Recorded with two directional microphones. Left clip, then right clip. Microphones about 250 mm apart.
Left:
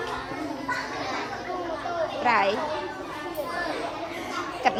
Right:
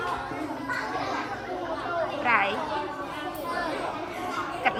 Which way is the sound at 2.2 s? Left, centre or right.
Centre.